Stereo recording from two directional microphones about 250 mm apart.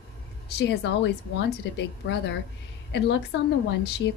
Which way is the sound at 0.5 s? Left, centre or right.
Left.